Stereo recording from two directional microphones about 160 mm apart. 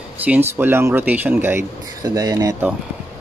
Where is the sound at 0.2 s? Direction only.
10° right (ahead or behind).